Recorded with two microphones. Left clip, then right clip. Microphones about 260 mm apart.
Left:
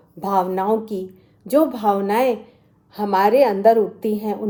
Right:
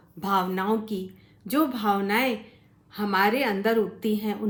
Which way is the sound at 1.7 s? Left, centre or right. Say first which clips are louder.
Left 6 dB; centre.